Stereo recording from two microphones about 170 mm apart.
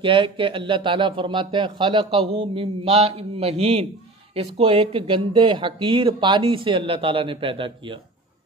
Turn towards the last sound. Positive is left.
turn(degrees=-30)  # may be behind; listen again after turning